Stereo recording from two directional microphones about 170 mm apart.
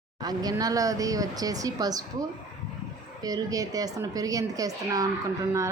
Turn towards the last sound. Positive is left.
turn(degrees=-20)  # may be behind; listen again after turning